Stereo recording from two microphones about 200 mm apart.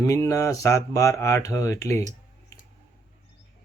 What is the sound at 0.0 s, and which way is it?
Speech, 15° left (ahead or behind).